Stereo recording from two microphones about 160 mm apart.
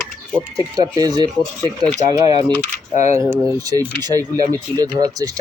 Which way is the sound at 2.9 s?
45° left (ahead or behind).